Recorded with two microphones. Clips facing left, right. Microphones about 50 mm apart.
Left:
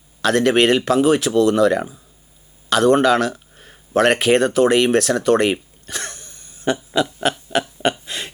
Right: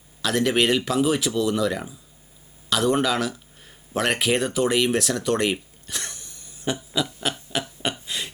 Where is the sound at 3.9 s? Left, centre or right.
Left.